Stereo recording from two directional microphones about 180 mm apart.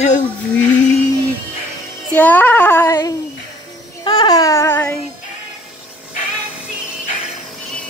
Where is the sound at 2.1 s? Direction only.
10° left (ahead or behind).